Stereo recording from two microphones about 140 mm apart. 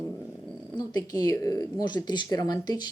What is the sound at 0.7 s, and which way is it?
Speech, 30° left (ahead or behind).